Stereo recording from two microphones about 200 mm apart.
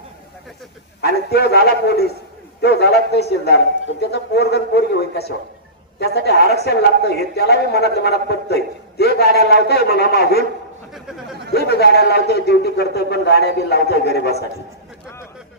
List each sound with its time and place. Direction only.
1.3 s a man's voice: 55° left (ahead or behind)
11.5 s a man's voice: 55° left (ahead or behind)